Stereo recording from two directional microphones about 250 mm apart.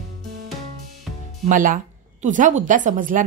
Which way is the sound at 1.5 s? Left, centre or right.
Right.